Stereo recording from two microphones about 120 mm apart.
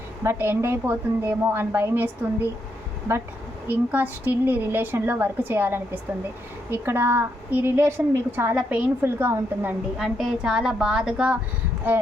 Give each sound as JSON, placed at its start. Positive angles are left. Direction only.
{"t": 0.2, "sound": "a woman's voice", "side_deg": -20}
{"t": 3.7, "sound": "a woman's voice", "side_deg": -15}
{"t": 10.0, "sound": "a woman's voice", "side_deg": -5}